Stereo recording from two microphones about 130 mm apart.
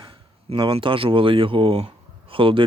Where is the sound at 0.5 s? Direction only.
40° right (ahead or behind).